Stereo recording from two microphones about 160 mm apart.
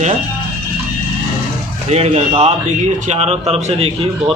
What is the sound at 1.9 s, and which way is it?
A man's voice, 40° right (ahead or behind).